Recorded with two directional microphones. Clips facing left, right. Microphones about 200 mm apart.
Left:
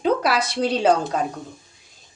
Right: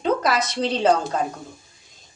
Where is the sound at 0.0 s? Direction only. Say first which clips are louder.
Left 1 dB; 10° left (ahead or behind).